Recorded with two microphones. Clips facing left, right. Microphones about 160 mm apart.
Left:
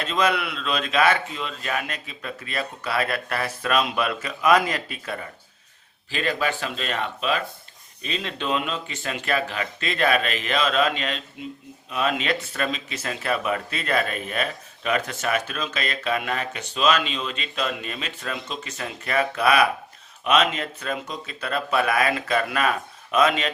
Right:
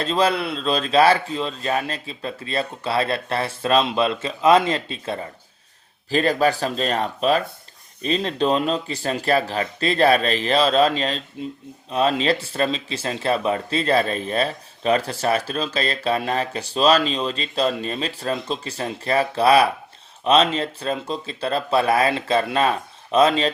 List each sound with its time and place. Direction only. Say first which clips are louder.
0.0 s speech: right 3 dB; 30° right (ahead or behind)
6.1 s speech: right 7 dB; 40° right (ahead or behind)